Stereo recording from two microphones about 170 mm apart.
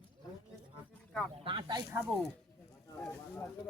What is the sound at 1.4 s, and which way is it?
Snake, 30° right (ahead or behind).